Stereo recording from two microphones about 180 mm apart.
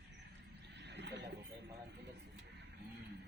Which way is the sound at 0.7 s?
75° right (ahead or behind).